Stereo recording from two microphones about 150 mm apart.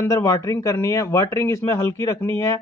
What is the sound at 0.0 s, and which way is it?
Speech, 20° left (ahead or behind).